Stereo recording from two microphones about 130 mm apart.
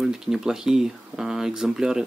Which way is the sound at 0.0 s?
5° right (ahead or behind).